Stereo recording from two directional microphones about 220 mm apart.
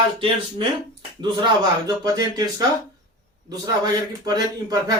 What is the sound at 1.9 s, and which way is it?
Speech, 15° right (ahead or behind).